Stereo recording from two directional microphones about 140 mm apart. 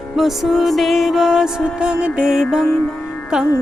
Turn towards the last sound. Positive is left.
turn(degrees=-5)  # may be behind; listen again after turning